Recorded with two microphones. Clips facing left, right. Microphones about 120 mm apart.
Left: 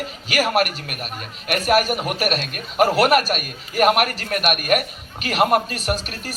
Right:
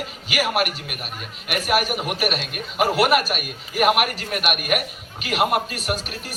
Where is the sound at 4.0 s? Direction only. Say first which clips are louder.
Left 2 dB; 40° left (ahead or behind).